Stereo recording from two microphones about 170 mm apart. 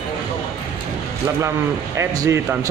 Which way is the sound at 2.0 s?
20° right (ahead or behind).